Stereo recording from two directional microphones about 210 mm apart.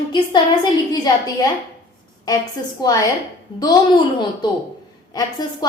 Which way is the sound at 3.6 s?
20° left (ahead or behind).